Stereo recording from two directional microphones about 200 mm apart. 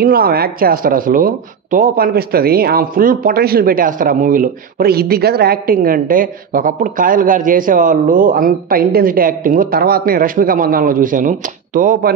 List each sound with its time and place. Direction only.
0.0 s speech: 50° right (ahead or behind)